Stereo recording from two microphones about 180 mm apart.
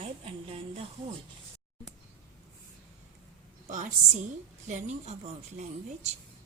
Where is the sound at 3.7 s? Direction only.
45° right (ahead or behind).